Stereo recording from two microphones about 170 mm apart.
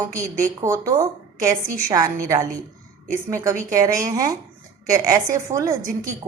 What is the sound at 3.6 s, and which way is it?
Speech, 20° right (ahead or behind).